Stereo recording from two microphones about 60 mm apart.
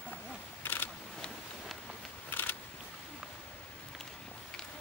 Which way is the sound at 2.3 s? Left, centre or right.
Left.